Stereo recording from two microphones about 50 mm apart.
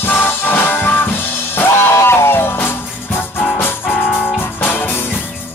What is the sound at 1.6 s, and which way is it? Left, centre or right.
Music, left.